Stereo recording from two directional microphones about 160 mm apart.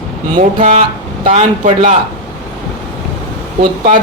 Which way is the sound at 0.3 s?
45° right (ahead or behind).